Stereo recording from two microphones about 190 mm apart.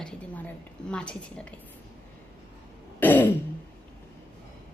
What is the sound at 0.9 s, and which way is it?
Speech, 5° left (ahead or behind).